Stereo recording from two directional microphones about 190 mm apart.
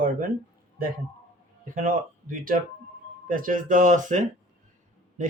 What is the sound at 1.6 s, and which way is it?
Speech, 45° right (ahead or behind).